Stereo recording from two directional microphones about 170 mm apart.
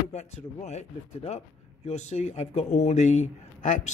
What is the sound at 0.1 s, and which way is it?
Speech, 40° left (ahead or behind).